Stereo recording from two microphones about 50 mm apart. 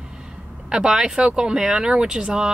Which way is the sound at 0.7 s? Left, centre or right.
Centre.